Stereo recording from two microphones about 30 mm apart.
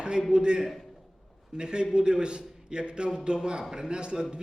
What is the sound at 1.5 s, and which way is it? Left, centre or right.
A man's voice, right.